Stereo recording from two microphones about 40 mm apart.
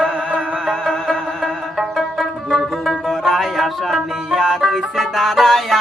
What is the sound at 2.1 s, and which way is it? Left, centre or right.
Music, centre.